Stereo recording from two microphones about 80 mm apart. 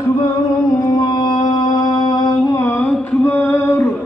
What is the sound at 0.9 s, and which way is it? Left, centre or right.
Music, left.